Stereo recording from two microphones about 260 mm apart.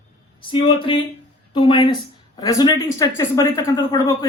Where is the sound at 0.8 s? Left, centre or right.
Centre.